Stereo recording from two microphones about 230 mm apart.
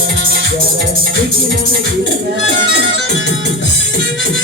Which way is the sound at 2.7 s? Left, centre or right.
Left.